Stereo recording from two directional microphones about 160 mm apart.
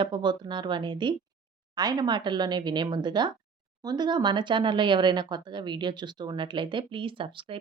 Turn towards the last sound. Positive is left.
turn(degrees=-35)  # may be behind; listen again after turning